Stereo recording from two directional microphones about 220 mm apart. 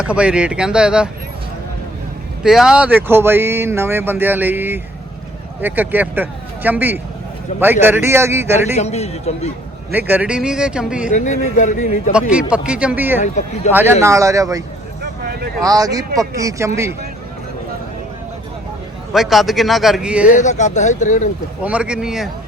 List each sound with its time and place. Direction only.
0.0 s speech: 5° right (ahead or behind)
2.4 s speech: centre (ahead or behind)
8.7 s speech: 30° left (ahead or behind)
10.1 s speech: 5° right (ahead or behind)
11.1 s a man's voice: 35° left (ahead or behind)
12.3 s speech: 5° right (ahead or behind)
13.7 s a man's voice: 30° left (ahead or behind)
14.0 s speech: 15° right (ahead or behind)
15.6 s speech: 15° right (ahead or behind)
19.1 s speech: centre (ahead or behind)
20.2 s a man's voice: 35° left (ahead or behind)
21.6 s speech: 5° right (ahead or behind)